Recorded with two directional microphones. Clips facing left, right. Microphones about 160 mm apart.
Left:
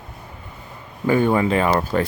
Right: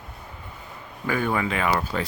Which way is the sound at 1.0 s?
30° left (ahead or behind).